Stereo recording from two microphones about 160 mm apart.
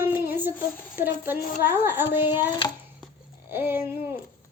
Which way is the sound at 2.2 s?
30° left (ahead or behind).